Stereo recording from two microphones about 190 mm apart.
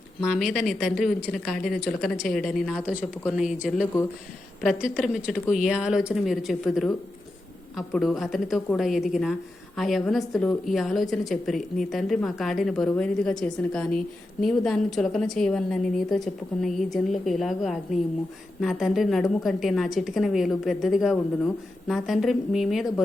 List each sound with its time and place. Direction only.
0.3 s a woman's voice: centre (ahead or behind)
4.8 s a woman's voice: 5° right (ahead or behind)